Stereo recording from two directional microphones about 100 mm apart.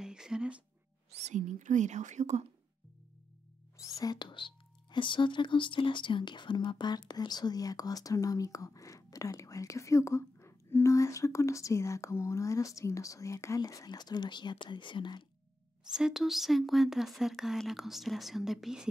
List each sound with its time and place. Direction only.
0.0 s music: 5° right (ahead or behind)
3.7 s speech: 35° left (ahead or behind); by 15.2 s 55° left (ahead or behind)
15.9 s speech: 5° right (ahead or behind)